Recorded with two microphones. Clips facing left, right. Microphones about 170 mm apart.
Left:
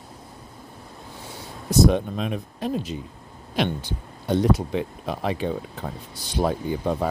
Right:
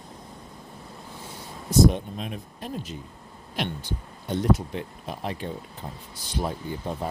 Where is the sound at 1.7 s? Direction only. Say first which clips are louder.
Left 1 dB; 80° left.